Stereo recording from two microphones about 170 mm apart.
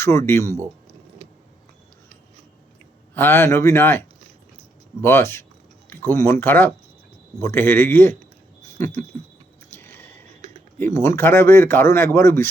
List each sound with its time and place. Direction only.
0.0 s speech: 15° left (ahead or behind)
3.2 s speech: 10° left (ahead or behind)
9.7 s a sound: 10° left (ahead or behind)
10.8 s speech: 15° left (ahead or behind)